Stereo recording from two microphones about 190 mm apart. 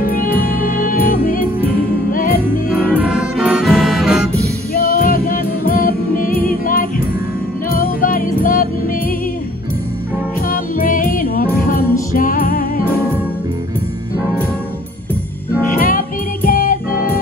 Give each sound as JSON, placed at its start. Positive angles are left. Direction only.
{"t": 0.9, "sound": "music", "side_deg": 50}
{"t": 2.7, "sound": "music", "side_deg": -5}
{"t": 4.8, "sound": "music", "side_deg": 50}
{"t": 10.5, "sound": "music", "side_deg": 45}
{"t": 15.7, "sound": "music", "side_deg": 45}